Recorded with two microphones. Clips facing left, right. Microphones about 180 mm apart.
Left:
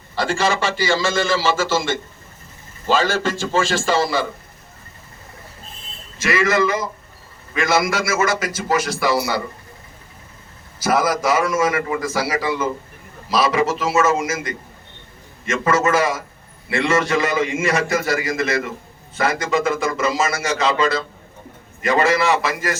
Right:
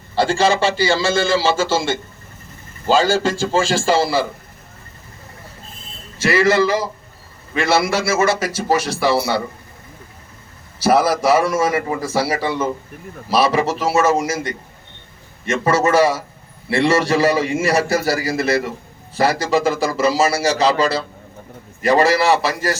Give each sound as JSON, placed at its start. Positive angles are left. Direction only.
{"t": 0.2, "sound": "a man's voice", "side_deg": -30}
{"t": 6.1, "sound": "a man's voice", "side_deg": -35}
{"t": 10.8, "sound": "a man's voice", "side_deg": -30}